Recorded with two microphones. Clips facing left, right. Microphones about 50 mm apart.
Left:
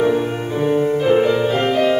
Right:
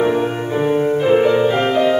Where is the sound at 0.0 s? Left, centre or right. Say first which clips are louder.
Right 1 dB; centre.